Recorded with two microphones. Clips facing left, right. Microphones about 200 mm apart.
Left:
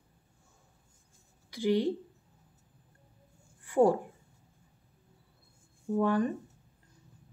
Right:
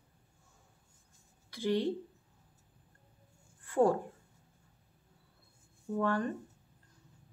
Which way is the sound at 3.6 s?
10° left (ahead or behind).